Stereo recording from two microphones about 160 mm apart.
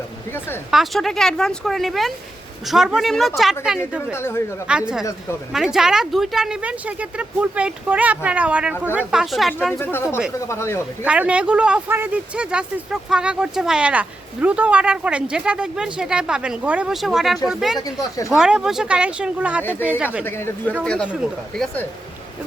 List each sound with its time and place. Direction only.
0.3 s speech: 15° left (ahead or behind)
0.7 s speech: centre (ahead or behind)
4.1 s speech: 15° left (ahead or behind)
4.6 s speech: 5° right (ahead or behind)
9.7 s speech: 15° left (ahead or behind)
11.0 s speech: 10° right (ahead or behind)
17.7 s speech: 20° left (ahead or behind)
18.3 s speech: 5° right (ahead or behind)
20.2 s speech: 15° left (ahead or behind)